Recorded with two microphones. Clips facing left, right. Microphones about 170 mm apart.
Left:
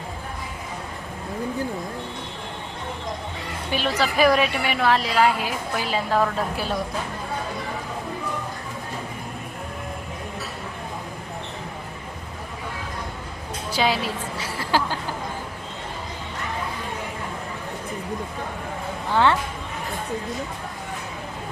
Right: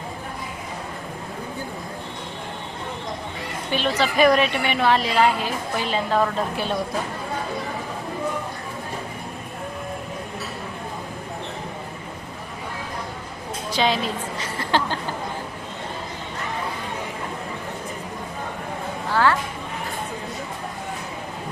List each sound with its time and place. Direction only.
3.7 s a woman's voice: 5° left (ahead or behind)
13.7 s a sound: 5° left (ahead or behind)
19.1 s speech: 25° left (ahead or behind)